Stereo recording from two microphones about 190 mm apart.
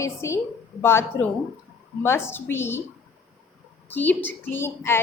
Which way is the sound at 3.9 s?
10° left (ahead or behind).